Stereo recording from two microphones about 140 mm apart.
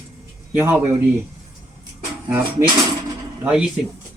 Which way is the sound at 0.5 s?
15° right (ahead or behind).